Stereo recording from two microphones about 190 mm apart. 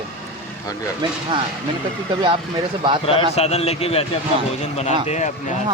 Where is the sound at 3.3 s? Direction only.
35° left (ahead or behind).